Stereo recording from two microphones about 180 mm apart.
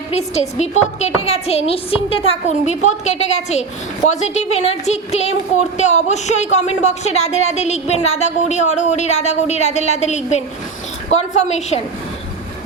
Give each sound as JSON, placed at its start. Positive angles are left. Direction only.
{"t": 0.1, "sound": "speech", "side_deg": 35}